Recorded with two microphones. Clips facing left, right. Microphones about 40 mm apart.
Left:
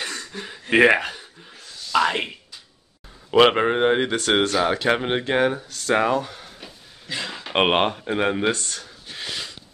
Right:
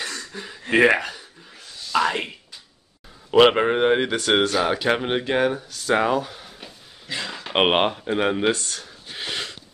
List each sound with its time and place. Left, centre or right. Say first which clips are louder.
0.0 s throat clearing: left 1 dB; centre
1.9 s speech: left 1 dB; centre
3.3 s speech: right 1 dB; centre
5.9 s a sound: left 1 dB; centre
7.4 s speech: even; centre
9.3 s a sound: right 3 dB; right